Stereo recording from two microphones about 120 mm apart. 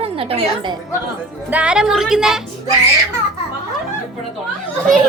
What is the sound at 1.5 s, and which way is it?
Speech, 10° right (ahead or behind).